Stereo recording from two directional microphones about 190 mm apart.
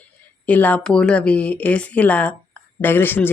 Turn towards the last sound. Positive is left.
turn(degrees=10)  # may be behind; listen again after turning